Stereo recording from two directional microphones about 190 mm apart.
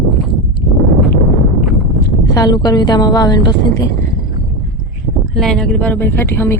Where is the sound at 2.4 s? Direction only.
20° left (ahead or behind).